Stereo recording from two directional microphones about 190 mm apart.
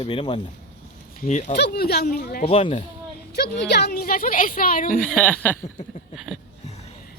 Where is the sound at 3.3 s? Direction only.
60° left (ahead or behind).